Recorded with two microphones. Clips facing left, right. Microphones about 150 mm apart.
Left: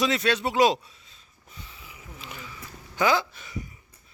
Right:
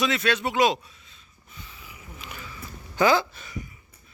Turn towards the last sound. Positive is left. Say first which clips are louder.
# right 3 dB
turn(degrees=10)  # may be behind; listen again after turning